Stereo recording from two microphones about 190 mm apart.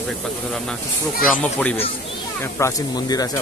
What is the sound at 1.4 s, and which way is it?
Speech, 5° left (ahead or behind).